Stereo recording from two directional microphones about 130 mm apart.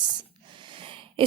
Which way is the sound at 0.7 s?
40° right (ahead or behind).